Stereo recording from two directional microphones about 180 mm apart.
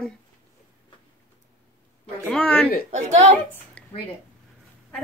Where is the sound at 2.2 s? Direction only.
5° left (ahead or behind).